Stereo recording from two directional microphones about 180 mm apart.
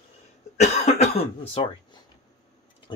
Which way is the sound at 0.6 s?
40° left (ahead or behind).